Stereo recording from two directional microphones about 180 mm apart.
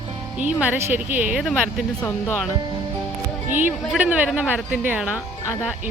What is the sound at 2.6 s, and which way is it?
Music, 20° right (ahead or behind).